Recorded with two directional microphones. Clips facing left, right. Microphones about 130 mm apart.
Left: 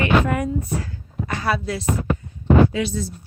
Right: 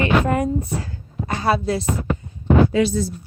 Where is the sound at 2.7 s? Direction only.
40° right (ahead or behind).